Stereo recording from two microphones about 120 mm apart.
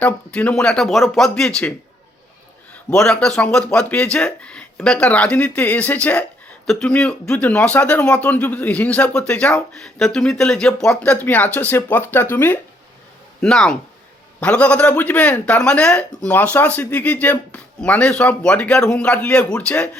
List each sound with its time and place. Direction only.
0.0 s speech: 10° left (ahead or behind)
2.9 s speech: 5° left (ahead or behind)
13.4 s speech: 5° left (ahead or behind)